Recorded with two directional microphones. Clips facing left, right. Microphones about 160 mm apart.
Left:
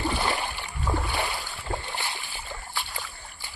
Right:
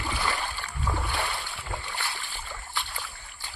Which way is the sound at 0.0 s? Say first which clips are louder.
Left 4 dB; 25° left (ahead or behind).